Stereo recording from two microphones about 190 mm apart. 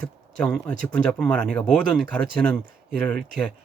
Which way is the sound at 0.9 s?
5° left (ahead or behind).